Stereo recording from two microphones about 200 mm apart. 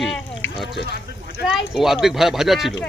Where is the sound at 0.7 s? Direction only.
60° left (ahead or behind).